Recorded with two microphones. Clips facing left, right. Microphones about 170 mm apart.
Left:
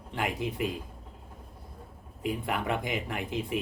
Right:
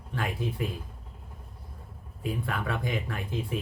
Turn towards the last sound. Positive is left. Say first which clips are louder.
# left 1 dB
turn(degrees=20)  # may be behind; listen again after turning